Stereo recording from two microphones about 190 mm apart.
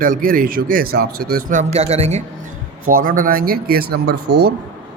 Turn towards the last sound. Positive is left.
turn(degrees=-55)  # may be behind; listen again after turning